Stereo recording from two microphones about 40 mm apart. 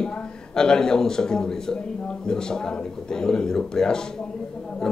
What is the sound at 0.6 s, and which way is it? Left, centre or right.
A man's voice, centre.